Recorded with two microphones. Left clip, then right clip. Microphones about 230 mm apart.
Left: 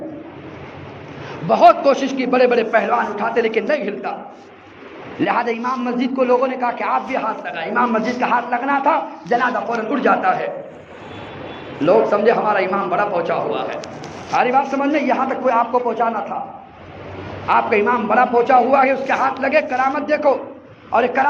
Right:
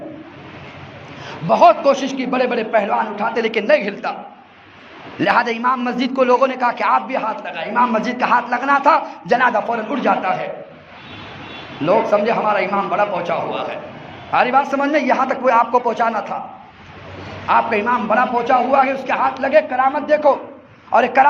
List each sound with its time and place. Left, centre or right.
1.5 s a man's voice: right
5.2 s a man's voice: right
11.8 s a man's voice: right
17.4 s a man's voice: right